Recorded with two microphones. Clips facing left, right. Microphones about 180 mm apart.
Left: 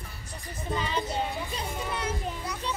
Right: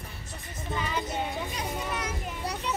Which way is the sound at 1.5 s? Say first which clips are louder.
Even; 30° left (ahead or behind).